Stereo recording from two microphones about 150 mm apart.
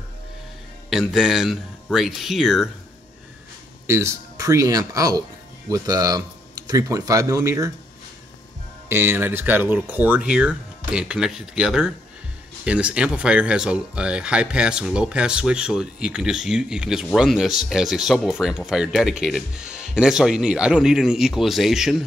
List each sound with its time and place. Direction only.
0.8 s speech: centre (ahead or behind)
3.8 s speech: 20° right (ahead or behind)
8.8 s speech: 15° right (ahead or behind)